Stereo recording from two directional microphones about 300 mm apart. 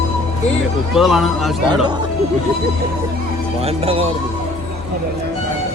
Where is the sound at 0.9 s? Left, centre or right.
Centre.